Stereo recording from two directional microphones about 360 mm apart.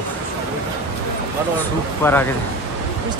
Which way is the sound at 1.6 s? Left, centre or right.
Centre.